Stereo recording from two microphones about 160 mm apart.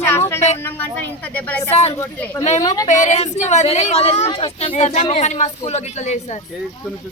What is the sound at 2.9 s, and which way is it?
A woman's voice, 50° left (ahead or behind).